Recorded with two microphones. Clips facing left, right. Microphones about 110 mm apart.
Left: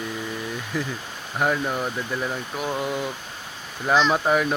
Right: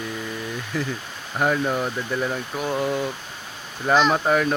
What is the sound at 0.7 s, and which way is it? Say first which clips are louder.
Speech: right 1 dB; 10° left (ahead or behind).